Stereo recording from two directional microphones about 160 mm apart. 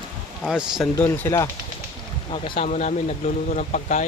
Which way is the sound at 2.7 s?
50° left (ahead or behind).